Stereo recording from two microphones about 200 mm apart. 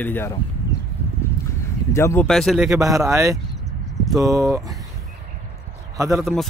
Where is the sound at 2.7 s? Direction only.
15° right (ahead or behind).